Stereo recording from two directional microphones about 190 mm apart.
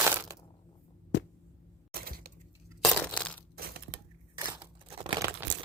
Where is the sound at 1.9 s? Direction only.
50° right (ahead or behind).